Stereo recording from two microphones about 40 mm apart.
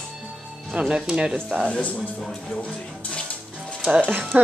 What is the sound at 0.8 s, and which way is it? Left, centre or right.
Speech, right.